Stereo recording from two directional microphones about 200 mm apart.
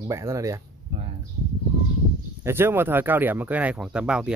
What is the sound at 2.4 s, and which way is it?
Speech, 10° right (ahead or behind).